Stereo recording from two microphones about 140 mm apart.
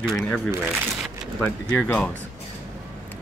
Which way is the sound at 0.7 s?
5° right (ahead or behind).